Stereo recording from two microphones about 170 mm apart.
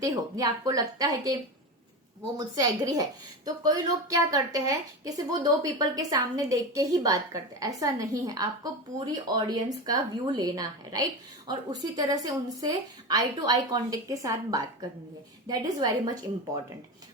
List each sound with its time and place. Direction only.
0.0 s a woman's voice: 20° right (ahead or behind)
2.4 s a woman's voice: 20° right (ahead or behind)